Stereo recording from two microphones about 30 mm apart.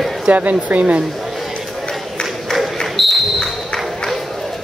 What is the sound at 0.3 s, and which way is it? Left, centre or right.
Speech, right.